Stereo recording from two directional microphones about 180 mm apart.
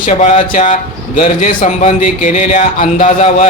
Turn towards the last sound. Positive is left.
turn(degrees=40)  # may be behind; listen again after turning